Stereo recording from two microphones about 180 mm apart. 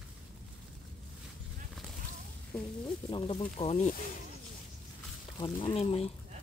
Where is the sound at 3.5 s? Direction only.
40° left (ahead or behind).